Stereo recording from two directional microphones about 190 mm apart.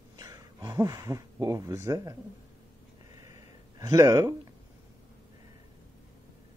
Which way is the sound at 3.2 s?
20° right (ahead or behind).